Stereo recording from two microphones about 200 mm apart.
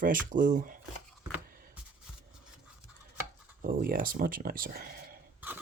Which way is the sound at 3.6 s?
45° right (ahead or behind).